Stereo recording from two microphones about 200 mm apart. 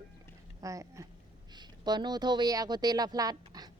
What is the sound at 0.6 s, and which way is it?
A woman's voice, 15° right (ahead or behind).